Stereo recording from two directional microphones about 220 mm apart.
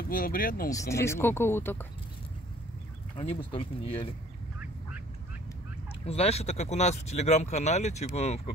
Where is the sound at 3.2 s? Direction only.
25° left (ahead or behind).